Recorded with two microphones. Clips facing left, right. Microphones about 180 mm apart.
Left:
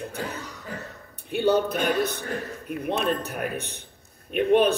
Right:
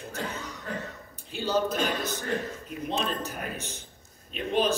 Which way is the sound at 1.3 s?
60° left (ahead or behind).